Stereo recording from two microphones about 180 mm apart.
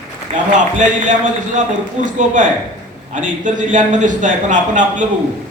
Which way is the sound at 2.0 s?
45° right (ahead or behind).